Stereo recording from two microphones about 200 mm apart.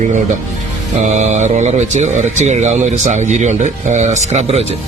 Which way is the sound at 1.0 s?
35° right (ahead or behind).